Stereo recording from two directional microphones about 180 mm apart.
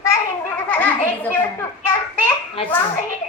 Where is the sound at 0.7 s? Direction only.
10° left (ahead or behind).